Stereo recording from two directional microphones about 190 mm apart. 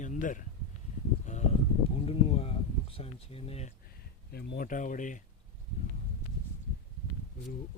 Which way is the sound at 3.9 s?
50° left (ahead or behind).